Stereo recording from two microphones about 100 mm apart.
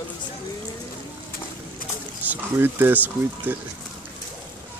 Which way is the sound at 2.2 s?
20° right (ahead or behind).